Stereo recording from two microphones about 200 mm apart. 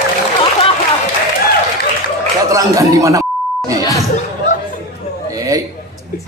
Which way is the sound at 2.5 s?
15° right (ahead or behind).